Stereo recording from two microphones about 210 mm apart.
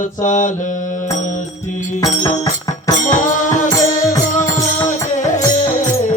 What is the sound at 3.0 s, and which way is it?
Music, 35° left (ahead or behind).